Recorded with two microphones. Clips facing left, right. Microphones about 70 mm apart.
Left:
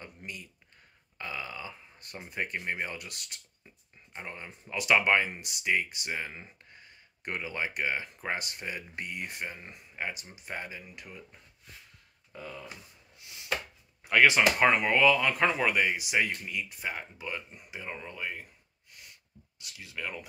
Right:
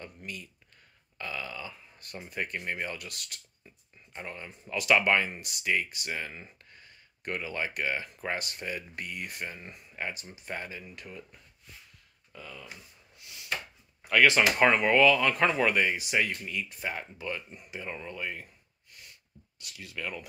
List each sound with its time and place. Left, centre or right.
0.0 s a sound: centre
1.1 s speech: centre
12.3 s speech: left
14.0 s speech: centre
14.6 s speech: centre
19.6 s speech: centre